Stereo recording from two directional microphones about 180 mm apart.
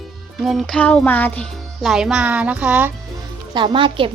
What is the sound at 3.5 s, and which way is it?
Speech, 25° right (ahead or behind).